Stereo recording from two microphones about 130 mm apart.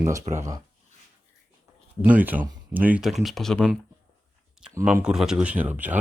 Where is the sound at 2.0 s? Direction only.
15° right (ahead or behind).